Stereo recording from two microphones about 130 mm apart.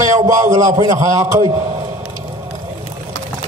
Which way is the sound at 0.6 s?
25° right (ahead or behind).